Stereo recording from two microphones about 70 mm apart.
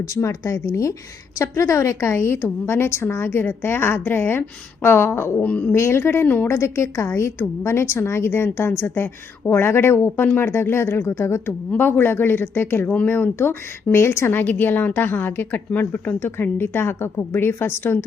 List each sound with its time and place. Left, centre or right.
0.1 s a woman's voice: left
5.4 s speech: left
5.7 s a woman's voice: left
6.5 s a woman's voice: left